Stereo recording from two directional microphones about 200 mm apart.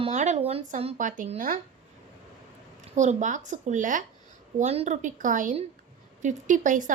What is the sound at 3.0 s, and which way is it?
Speech, 35° right (ahead or behind).